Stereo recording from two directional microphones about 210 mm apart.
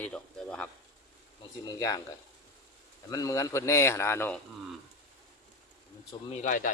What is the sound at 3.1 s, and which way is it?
A man's voice, 15° left (ahead or behind).